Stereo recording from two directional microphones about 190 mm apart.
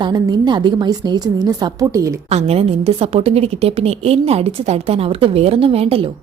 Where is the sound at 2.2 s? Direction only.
35° right (ahead or behind).